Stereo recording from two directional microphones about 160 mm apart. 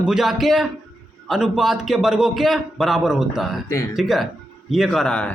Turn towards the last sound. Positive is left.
turn(degrees=5)  # may be behind; listen again after turning